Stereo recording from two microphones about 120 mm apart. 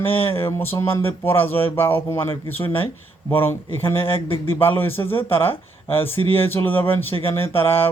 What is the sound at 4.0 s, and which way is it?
Speech, 50° left (ahead or behind).